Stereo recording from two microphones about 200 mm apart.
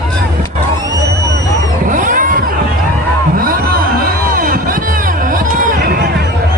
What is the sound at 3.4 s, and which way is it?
Music, 45° right (ahead or behind).